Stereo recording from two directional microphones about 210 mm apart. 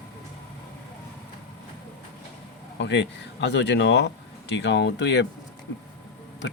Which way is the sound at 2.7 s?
55° left (ahead or behind).